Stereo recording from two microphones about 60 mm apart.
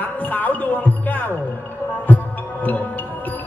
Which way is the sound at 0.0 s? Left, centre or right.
Left.